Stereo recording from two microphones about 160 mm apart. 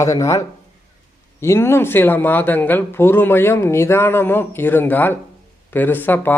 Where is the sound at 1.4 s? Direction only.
15° left (ahead or behind).